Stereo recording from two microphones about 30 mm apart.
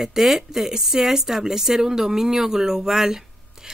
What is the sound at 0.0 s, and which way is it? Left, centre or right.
Speech, centre.